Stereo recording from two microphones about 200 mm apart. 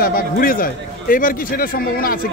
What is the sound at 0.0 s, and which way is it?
A man's voice, 45° left (ahead or behind).